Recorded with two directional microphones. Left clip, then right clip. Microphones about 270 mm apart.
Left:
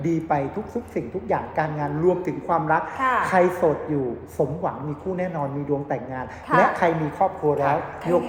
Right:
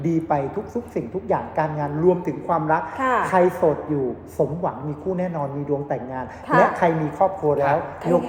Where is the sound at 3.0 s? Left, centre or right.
Right.